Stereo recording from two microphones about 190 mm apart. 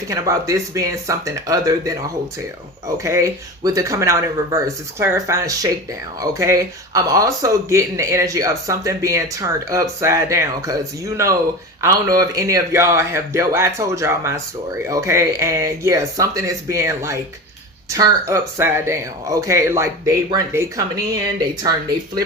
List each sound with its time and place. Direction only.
0.1 s speech: 15° right (ahead or behind)
3.0 s speech: 15° right (ahead or behind)